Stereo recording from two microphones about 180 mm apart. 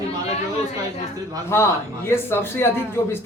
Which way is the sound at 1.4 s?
15° left (ahead or behind).